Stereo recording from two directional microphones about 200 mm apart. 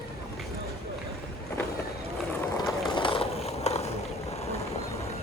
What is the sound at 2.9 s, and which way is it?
Skateboard, 25° left (ahead or behind).